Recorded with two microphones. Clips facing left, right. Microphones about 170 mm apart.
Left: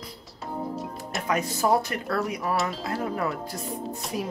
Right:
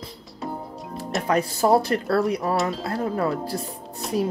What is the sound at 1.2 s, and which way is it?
Speech, 35° right (ahead or behind).